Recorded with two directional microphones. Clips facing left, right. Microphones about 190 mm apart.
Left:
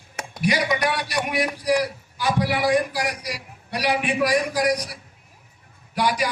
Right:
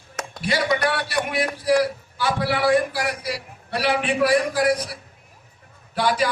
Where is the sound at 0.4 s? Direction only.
15° left (ahead or behind).